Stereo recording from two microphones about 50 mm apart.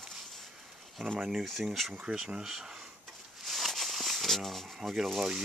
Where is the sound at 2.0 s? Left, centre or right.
Centre.